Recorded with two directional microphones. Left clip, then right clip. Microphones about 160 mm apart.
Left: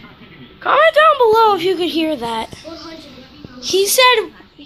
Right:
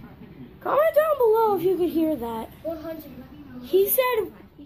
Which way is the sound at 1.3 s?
10° left (ahead or behind).